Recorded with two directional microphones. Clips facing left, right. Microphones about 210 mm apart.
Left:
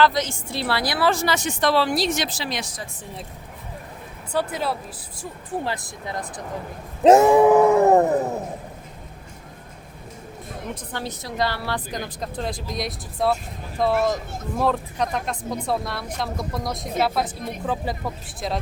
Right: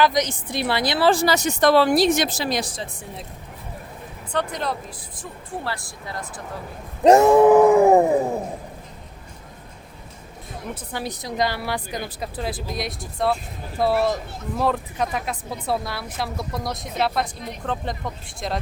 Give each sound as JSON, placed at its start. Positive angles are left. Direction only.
{"t": 0.0, "sound": "speech", "side_deg": -15}
{"t": 4.3, "sound": "speech", "side_deg": 5}
{"t": 5.5, "sound": "speech", "side_deg": 20}
{"t": 7.0, "sound": "a woman's voice", "side_deg": 0}
{"t": 10.9, "sound": "a woman's voice", "side_deg": -15}